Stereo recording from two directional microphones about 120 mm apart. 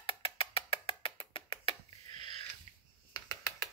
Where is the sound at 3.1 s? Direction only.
30° left (ahead or behind).